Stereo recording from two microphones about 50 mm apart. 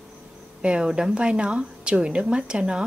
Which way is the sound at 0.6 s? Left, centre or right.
Centre.